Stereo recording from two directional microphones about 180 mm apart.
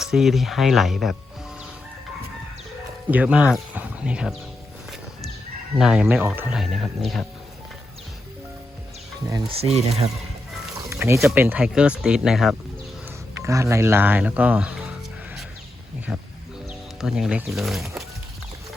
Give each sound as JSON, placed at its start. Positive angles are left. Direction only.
{"t": 0.0, "sound": "speech", "side_deg": 0}
{"t": 3.1, "sound": "speech", "side_deg": -10}
{"t": 5.7, "sound": "speech", "side_deg": -5}
{"t": 9.5, "sound": "speech", "side_deg": -35}
{"t": 10.8, "sound": "a sound", "side_deg": -15}
{"t": 11.2, "sound": "speech", "side_deg": -5}
{"t": 13.1, "sound": "speech", "side_deg": -15}
{"t": 16.1, "sound": "speech", "side_deg": 0}